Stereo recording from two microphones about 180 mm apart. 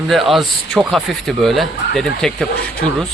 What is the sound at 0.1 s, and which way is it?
Speech, centre (ahead or behind).